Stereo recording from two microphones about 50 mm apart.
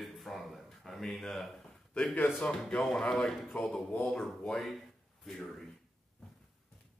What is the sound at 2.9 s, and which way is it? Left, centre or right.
Speech, centre.